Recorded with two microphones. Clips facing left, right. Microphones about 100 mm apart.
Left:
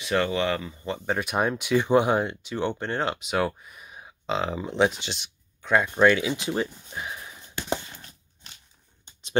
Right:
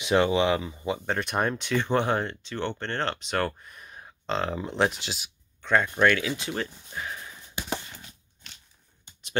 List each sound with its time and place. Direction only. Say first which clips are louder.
0.0 s speech: right 2 dB; 20° right (ahead or behind)
1.0 s speech: left 3 dB; 5° left (ahead or behind)
5.9 s speech: left 3 dB; 20° left (ahead or behind)
9.0 s a sound: left 5 dB; 25° left (ahead or behind)